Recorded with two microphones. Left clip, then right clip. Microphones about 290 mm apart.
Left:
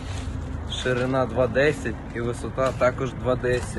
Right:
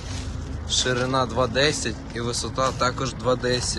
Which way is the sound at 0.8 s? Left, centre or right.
Centre.